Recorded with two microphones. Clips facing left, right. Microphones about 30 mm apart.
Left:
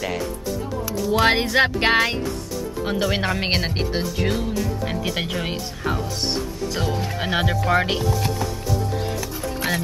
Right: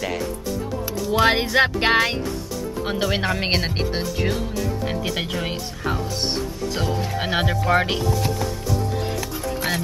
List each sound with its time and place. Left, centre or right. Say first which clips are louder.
1.0 s speech: even; centre
7.2 s speech: even; centre